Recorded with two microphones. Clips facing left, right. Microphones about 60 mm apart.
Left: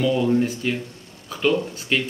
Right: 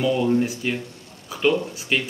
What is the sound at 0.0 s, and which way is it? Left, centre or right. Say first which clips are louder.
Speech: left 1 dB; centre.